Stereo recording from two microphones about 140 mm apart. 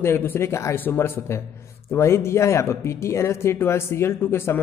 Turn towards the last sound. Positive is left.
turn(degrees=20)  # may be behind; listen again after turning